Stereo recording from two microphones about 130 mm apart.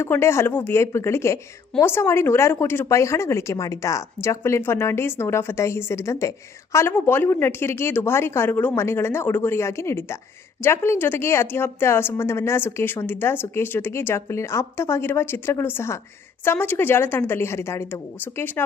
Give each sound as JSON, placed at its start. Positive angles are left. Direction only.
{"t": 0.0, "sound": "a woman's voice", "side_deg": 20}